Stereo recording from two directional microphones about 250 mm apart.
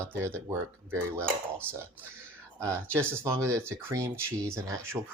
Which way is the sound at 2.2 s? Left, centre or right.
Centre.